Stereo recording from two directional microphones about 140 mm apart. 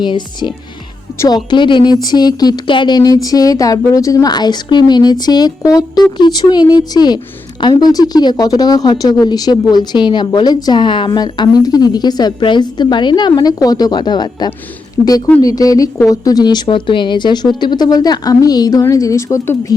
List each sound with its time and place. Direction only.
0.0 s speech: 35° left (ahead or behind)